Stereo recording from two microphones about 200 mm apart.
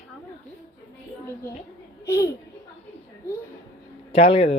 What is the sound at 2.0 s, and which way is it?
Speech, 15° left (ahead or behind).